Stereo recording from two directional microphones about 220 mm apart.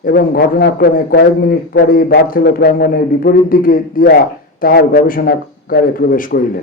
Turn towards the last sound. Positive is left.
turn(degrees=40)  # may be behind; listen again after turning